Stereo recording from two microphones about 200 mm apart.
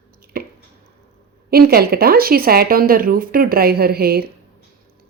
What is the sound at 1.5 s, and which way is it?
A woman's voice, 50° right (ahead or behind).